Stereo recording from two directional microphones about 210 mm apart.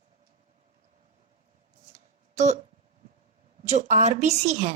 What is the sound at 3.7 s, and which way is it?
A woman's voice, 35° right (ahead or behind).